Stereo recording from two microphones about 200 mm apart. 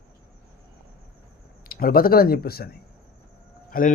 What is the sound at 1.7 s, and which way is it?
Speech, 45° left (ahead or behind).